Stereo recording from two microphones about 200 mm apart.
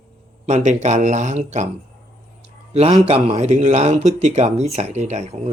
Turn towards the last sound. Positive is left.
turn(degrees=-35)  # may be behind; listen again after turning